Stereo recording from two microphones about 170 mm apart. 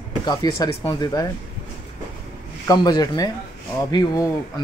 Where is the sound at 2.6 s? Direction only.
25° left (ahead or behind).